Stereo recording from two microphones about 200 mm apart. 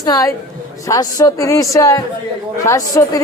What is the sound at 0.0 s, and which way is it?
Speech, 15° left (ahead or behind).